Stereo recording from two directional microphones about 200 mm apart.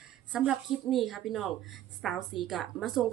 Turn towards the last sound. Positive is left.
turn(degrees=0)  # may be behind; listen again after turning